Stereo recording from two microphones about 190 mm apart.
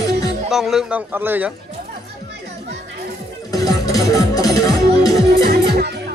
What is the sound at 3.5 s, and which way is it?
Music, 20° left (ahead or behind).